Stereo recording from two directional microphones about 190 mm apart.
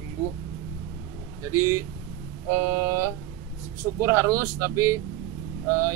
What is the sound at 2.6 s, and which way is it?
Speech, 10° right (ahead or behind).